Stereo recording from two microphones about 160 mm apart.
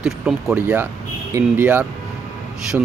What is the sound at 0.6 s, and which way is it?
Speech, 15° right (ahead or behind).